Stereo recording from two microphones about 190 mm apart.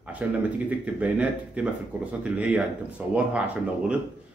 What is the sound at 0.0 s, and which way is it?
Speech, 5° right (ahead or behind).